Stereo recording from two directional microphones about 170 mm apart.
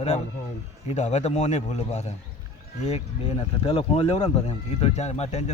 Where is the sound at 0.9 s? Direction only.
40° left (ahead or behind).